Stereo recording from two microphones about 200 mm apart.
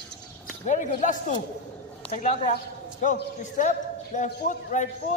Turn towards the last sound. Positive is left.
turn(degrees=40)  # may be behind; listen again after turning